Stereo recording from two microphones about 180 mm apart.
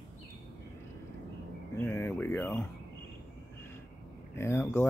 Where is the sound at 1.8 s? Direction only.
10° left (ahead or behind).